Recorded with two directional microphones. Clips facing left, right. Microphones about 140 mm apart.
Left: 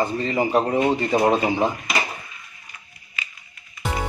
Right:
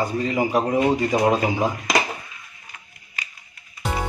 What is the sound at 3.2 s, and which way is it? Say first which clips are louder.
Music: left 1 dB; 40° right (ahead or behind).